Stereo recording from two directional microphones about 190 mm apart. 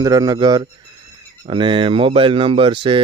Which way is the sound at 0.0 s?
20° right (ahead or behind).